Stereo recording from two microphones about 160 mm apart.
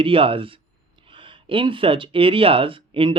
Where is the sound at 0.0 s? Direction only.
35° right (ahead or behind).